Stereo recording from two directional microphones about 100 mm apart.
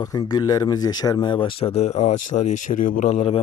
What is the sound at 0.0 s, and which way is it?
Speech, 40° left (ahead or behind).